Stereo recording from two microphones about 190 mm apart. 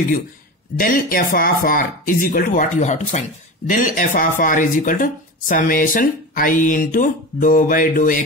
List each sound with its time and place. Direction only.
0.7 s speech: 45° left (ahead or behind)